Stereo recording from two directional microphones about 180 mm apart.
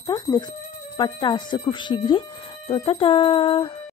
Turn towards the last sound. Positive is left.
turn(degrees=30)  # may be behind; listen again after turning